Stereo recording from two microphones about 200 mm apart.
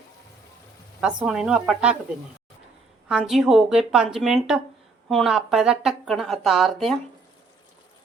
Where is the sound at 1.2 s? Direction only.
Centre (ahead or behind).